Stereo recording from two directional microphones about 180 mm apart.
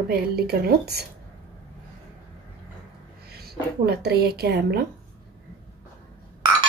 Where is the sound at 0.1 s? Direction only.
60° right (ahead or behind).